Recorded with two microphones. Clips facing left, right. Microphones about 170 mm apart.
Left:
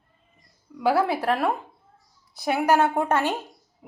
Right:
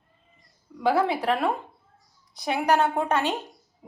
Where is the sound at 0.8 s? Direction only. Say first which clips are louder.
Left 1 dB; 5° left (ahead or behind).